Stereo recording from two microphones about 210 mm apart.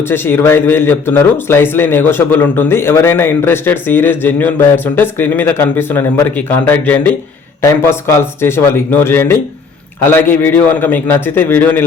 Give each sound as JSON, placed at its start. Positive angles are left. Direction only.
{"t": 0.1, "sound": "speech", "side_deg": 10}